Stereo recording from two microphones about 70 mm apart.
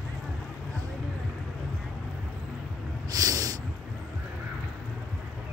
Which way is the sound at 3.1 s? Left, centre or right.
Right.